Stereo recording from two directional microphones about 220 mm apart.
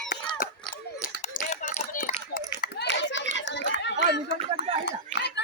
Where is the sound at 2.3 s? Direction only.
45° left (ahead or behind).